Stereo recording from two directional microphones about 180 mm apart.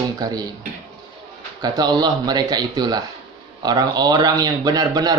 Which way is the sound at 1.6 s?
20° right (ahead or behind).